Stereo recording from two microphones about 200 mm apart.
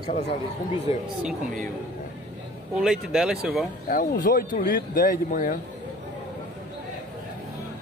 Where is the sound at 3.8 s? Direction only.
45° left (ahead or behind).